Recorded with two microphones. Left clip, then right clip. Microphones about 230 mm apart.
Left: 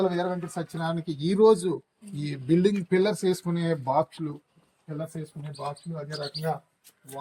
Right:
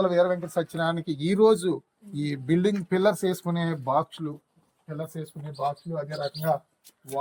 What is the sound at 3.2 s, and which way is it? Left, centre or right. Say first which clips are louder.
Speech: left 1 dB; right.